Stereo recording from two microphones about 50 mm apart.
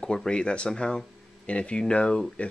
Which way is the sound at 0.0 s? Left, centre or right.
Centre.